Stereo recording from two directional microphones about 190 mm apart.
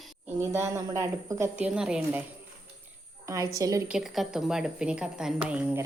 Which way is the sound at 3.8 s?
Centre (ahead or behind).